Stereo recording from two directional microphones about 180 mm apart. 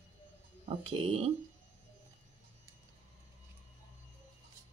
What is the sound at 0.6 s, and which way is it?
Speech, 30° right (ahead or behind).